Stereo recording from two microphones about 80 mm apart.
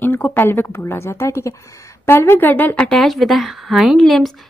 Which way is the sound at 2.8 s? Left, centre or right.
Centre.